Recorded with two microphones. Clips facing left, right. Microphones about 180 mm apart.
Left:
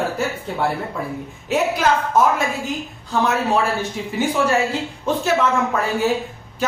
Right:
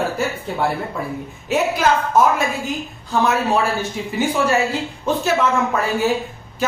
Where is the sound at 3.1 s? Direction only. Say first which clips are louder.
Right 1 dB; 5° right (ahead or behind).